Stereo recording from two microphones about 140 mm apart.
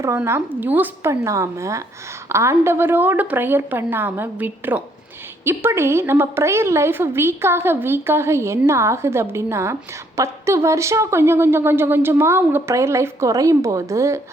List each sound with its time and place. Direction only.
0.2 s a woman's voice: 15° right (ahead or behind)